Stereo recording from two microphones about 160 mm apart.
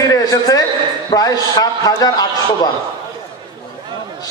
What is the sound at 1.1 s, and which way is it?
A man's voice, 25° left (ahead or behind).